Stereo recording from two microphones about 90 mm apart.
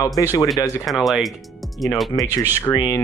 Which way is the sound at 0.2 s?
40° left (ahead or behind).